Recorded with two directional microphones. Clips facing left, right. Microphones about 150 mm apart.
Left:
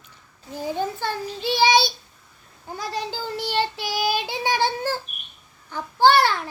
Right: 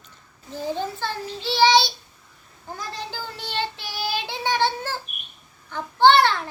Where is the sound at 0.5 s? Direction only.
15° left (ahead or behind).